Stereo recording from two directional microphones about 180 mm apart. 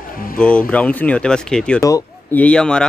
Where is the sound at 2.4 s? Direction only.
5° left (ahead or behind).